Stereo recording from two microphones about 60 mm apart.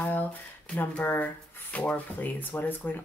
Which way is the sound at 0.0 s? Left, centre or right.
Left.